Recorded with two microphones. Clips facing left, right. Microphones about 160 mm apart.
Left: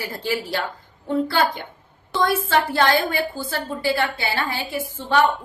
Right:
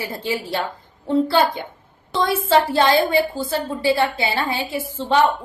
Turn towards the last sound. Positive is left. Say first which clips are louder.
# right 3 dB
turn(degrees=-25)  # may be behind; listen again after turning